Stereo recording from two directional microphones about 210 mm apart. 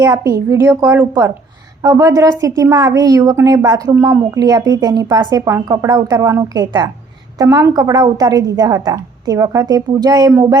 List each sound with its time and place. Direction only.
0.0 s a woman's voice: 15° right (ahead or behind)